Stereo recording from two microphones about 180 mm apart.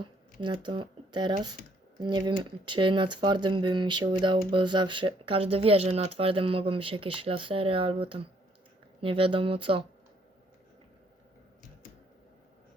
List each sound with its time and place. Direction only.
0.0 s speech: 25° right (ahead or behind)